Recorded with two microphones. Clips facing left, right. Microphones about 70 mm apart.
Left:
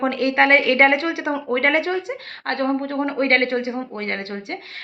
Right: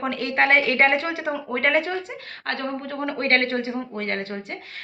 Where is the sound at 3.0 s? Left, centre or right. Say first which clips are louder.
Left 1 dB; left.